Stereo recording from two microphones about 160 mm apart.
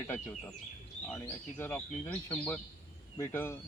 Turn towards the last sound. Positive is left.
turn(degrees=15)  # may be behind; listen again after turning